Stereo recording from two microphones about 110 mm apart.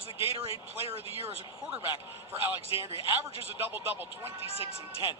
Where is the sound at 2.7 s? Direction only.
50° left (ahead or behind).